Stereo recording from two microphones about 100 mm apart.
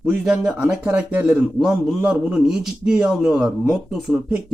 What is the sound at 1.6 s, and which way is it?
A man's voice, 5° right (ahead or behind).